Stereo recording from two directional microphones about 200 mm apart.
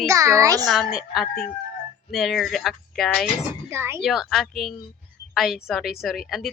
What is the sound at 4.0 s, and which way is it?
A woman's voice, centre (ahead or behind).